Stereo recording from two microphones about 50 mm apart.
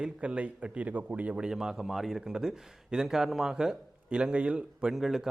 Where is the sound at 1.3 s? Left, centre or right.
Centre.